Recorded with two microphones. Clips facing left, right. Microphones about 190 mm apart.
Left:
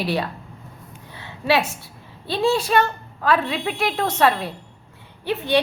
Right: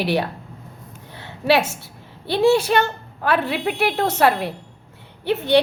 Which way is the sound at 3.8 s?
65° right (ahead or behind).